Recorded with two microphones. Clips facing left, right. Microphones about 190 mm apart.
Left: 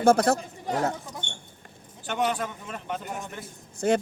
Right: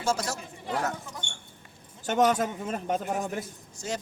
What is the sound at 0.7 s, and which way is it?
Speech, 35° left (ahead or behind).